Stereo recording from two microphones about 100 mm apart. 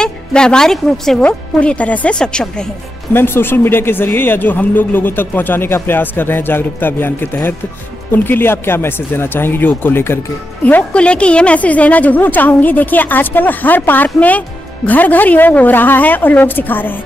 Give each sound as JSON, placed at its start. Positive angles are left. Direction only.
{"t": 0.0, "sound": "speech", "side_deg": 10}
{"t": 3.1, "sound": "speech", "side_deg": 20}